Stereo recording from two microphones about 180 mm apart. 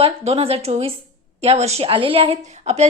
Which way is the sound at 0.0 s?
35° right (ahead or behind).